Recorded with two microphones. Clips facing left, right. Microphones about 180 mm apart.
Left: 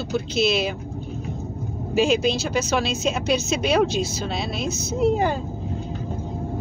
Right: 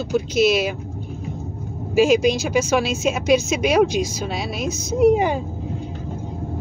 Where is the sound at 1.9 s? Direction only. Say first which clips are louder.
Right 4 dB; 10° right (ahead or behind).